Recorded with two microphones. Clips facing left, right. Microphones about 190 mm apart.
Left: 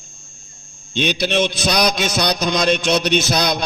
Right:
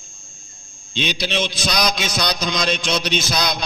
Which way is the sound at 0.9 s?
55° left (ahead or behind).